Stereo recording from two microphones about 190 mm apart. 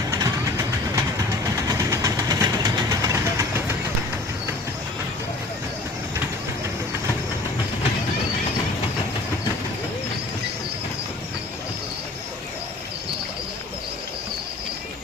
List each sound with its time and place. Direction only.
0.1 s train: 15° right (ahead or behind)
1.6 s vehicle: 15° right (ahead or behind)